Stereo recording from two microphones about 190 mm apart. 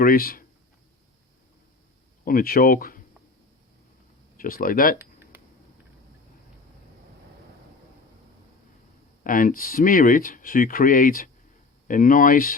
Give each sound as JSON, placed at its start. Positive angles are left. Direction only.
{"t": 0.0, "sound": "speech", "side_deg": 50}
{"t": 2.2, "sound": "speech", "side_deg": 50}
{"t": 4.4, "sound": "speech", "side_deg": 50}
{"t": 9.2, "sound": "speech", "side_deg": 45}